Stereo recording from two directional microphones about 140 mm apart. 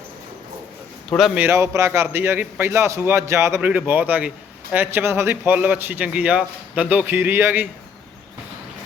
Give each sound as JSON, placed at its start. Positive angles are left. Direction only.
{"t": 1.4, "sound": "a man's voice", "side_deg": -20}